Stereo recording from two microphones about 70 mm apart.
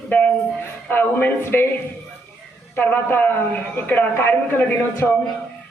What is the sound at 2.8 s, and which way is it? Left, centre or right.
A man's voice, left.